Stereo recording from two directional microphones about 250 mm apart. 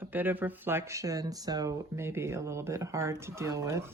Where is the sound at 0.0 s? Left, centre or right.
Centre.